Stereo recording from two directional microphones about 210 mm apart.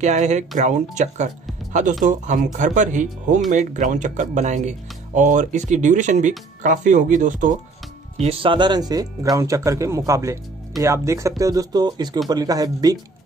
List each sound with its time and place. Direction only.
0.0 s speech: 35° right (ahead or behind)
8.2 s speech: 25° right (ahead or behind)